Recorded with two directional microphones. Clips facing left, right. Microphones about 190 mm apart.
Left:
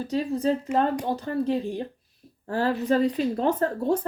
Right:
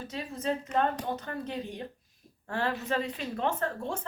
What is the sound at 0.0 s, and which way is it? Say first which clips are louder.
A woman's voice: left 10 dB; 35° left (ahead or behind).